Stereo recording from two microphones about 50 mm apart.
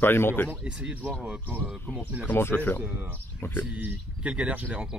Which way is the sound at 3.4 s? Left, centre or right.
Left.